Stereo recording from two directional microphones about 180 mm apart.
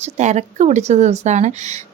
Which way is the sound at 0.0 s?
40° right (ahead or behind).